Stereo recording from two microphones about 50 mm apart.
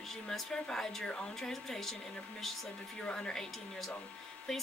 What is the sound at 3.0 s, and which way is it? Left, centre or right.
Speech, centre.